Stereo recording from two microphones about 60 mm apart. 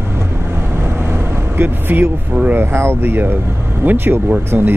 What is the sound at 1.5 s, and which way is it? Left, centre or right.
Speech, right.